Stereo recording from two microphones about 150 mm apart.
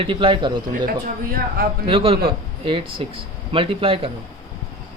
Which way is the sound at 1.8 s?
40° right (ahead or behind).